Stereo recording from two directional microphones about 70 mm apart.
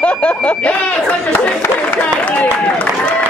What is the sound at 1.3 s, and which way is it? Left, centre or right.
Speech, left.